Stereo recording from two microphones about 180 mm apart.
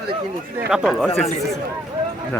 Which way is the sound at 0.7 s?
Centre (ahead or behind).